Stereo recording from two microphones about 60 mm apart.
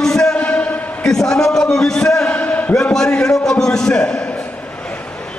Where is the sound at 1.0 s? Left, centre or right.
Centre.